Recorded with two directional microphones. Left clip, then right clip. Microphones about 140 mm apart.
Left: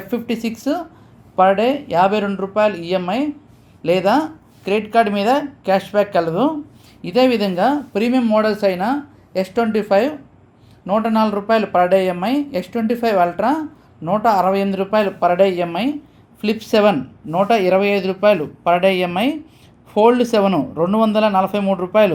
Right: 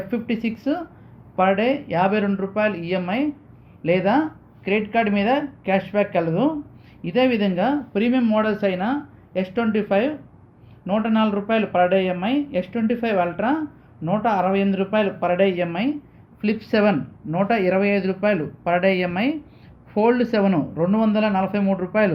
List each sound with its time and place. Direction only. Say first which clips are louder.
0.1 s speech: left 6 dB; 40° left (ahead or behind)